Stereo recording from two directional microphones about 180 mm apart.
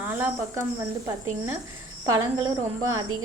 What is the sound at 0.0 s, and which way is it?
Speech, 10° right (ahead or behind).